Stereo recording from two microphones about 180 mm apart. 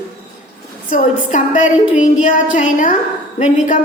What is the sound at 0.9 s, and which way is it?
A woman's voice, 45° left (ahead or behind).